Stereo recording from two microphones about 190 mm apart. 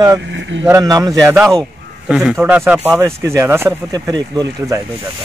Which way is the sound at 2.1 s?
5° right (ahead or behind).